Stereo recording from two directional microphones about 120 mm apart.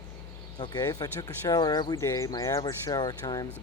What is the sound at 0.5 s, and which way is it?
Speech, 35° left (ahead or behind).